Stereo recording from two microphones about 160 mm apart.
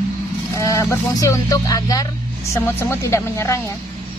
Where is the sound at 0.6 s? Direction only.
20° left (ahead or behind).